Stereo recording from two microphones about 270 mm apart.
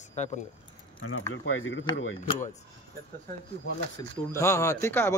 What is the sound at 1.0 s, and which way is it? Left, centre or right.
Speech, left.